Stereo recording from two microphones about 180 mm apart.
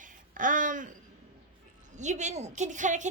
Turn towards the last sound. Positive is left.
turn(degrees=-45)  # may be behind; listen again after turning